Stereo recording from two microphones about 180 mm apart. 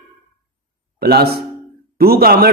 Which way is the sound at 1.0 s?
60° right (ahead or behind).